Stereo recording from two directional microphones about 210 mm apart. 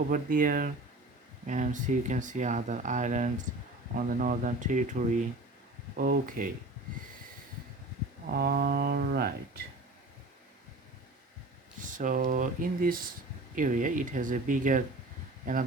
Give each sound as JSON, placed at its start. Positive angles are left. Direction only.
{"t": 0.1, "sound": "speech", "side_deg": -40}
{"t": 8.3, "sound": "speech", "side_deg": -45}
{"t": 11.8, "sound": "speech", "side_deg": -40}